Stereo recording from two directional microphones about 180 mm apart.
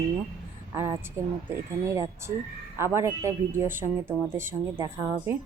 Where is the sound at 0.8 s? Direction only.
15° right (ahead or behind).